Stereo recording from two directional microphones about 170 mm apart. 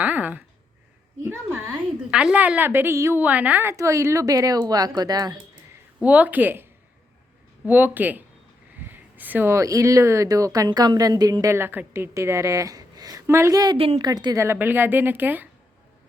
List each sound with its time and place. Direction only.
0.0 s a sound: 10° right (ahead or behind)
1.2 s a woman's voice: 15° right (ahead or behind)
6.0 s a woman's voice: 10° right (ahead or behind)
7.7 s a woman's voice: 10° right (ahead or behind)
13.7 s speech: 35° right (ahead or behind)
14.1 s a woman's voice: 25° right (ahead or behind)